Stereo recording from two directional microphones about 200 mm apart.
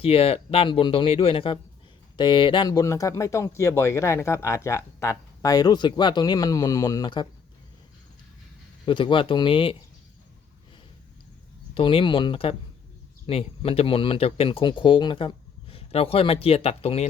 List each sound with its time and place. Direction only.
0.0 s speech: 30° left (ahead or behind)
8.9 s speech: 25° left (ahead or behind)
11.7 s speech: 25° left (ahead or behind)